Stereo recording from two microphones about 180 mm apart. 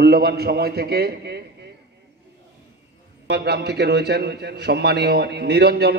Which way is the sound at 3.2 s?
65° right (ahead or behind).